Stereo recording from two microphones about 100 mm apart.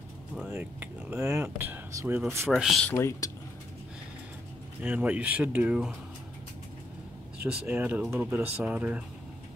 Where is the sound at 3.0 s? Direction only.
30° left (ahead or behind).